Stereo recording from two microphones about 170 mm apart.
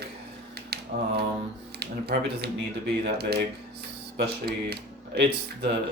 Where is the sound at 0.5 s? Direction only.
70° right (ahead or behind).